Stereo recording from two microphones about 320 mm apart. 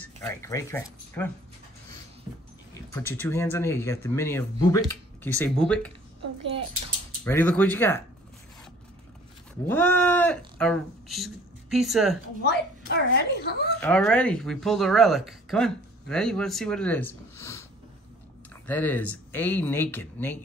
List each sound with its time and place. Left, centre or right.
0.0 s speech: centre
2.9 s speech: centre
7.2 s speech: centre
9.7 s speech: centre
12.4 s a child's voice: left
13.7 s speech: centre
18.7 s speech: centre